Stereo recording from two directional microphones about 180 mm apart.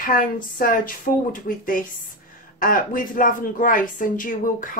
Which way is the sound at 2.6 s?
50° left (ahead or behind).